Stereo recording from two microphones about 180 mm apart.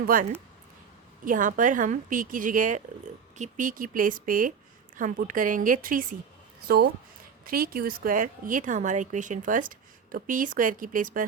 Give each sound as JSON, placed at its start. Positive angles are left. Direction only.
{"t": 0.0, "sound": "a woman's voice", "side_deg": -50}
{"t": 6.7, "sound": "a woman's voice", "side_deg": -60}